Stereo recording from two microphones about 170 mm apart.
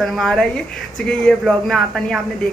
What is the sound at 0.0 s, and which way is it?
Speech, centre (ahead or behind).